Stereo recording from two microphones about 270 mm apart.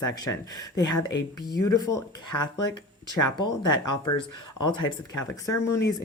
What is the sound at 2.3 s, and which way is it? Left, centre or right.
Speech, left.